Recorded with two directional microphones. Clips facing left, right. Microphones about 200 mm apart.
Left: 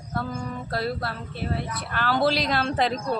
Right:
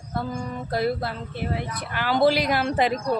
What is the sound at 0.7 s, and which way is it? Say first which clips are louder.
Speech: right 5 dB; 15° right (ahead or behind).